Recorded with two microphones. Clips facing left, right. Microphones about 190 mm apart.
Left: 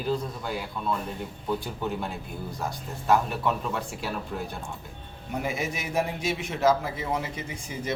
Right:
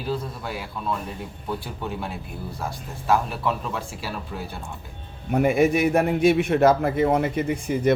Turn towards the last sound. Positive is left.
turn(degrees=-60)  # may be behind; listen again after turning